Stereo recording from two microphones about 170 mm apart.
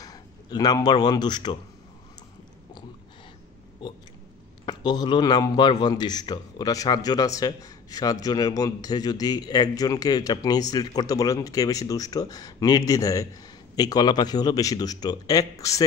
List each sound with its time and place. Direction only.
0.0 s a man's voice: 20° left (ahead or behind)
3.8 s a man's voice: 25° left (ahead or behind)